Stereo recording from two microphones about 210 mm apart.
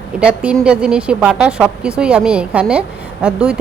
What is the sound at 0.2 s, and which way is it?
A woman's voice, 5° right (ahead or behind).